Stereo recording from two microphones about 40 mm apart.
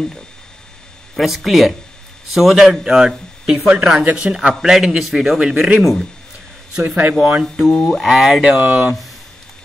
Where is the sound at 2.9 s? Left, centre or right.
Centre.